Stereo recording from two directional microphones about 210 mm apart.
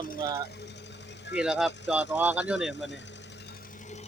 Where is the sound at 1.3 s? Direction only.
5° right (ahead or behind).